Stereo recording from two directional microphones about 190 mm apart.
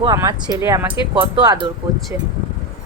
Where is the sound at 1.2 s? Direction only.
25° right (ahead or behind).